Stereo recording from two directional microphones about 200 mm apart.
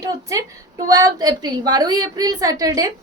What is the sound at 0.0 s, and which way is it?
A woman's voice, 15° right (ahead or behind).